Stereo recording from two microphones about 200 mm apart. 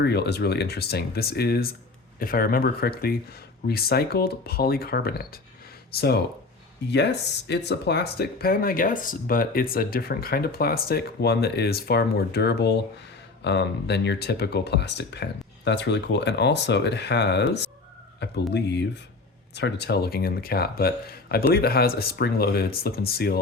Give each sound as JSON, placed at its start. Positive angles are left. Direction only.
{"t": 0.0, "sound": "speech", "side_deg": 55}